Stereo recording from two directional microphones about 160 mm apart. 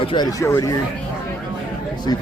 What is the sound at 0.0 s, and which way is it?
Speech, 30° left (ahead or behind).